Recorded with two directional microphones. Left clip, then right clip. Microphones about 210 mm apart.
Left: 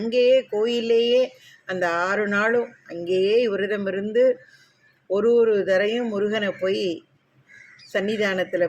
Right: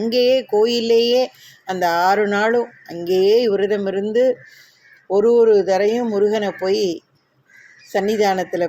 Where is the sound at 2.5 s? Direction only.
20° right (ahead or behind).